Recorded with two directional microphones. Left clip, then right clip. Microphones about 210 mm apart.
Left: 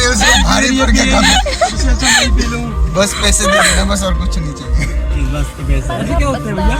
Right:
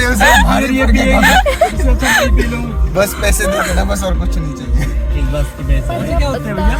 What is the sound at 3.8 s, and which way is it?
Speech, 60° right (ahead or behind).